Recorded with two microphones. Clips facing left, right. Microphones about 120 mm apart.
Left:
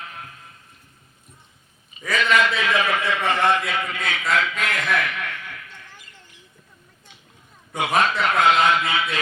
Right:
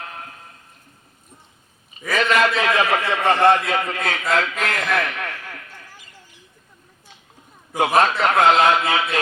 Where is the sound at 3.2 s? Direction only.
30° right (ahead or behind).